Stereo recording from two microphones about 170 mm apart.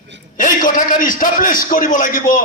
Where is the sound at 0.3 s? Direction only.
50° left (ahead or behind).